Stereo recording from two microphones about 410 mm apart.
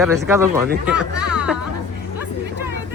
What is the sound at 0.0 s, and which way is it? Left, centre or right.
Speech, centre.